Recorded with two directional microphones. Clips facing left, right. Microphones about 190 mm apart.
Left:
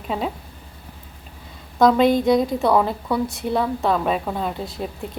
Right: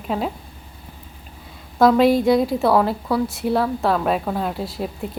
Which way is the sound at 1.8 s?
5° right (ahead or behind).